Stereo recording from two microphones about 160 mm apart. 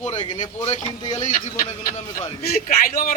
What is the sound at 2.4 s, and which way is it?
Speech, 70° left (ahead or behind).